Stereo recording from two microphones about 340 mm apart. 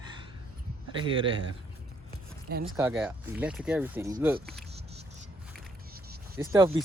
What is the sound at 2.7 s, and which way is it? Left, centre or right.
Speech, centre.